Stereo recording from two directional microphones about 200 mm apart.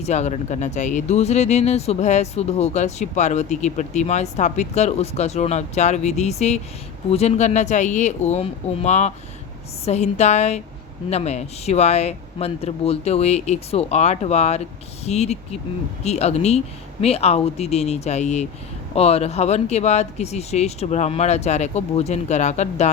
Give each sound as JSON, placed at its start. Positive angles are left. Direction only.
{"t": 0.0, "sound": "speech", "side_deg": 35}